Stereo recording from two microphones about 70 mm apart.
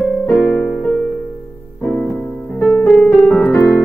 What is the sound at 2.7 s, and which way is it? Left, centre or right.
Music, left.